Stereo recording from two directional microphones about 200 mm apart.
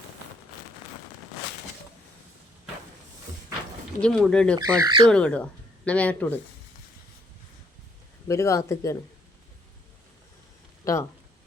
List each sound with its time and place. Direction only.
4.0 s speech: 5° left (ahead or behind)
4.5 s speech: 20° right (ahead or behind)
5.0 s speech: 5° left (ahead or behind)
8.3 s speech: 15° left (ahead or behind)
10.8 s speech: 15° left (ahead or behind)